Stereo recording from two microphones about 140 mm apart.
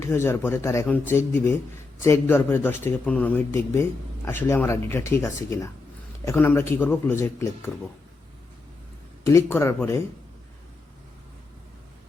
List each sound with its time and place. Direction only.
0.0 s speech: 20° left (ahead or behind)
9.2 s speech: 20° left (ahead or behind)